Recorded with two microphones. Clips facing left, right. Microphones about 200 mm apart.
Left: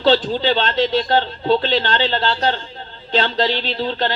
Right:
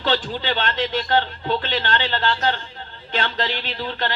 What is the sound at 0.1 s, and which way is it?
A man's voice, 30° left (ahead or behind).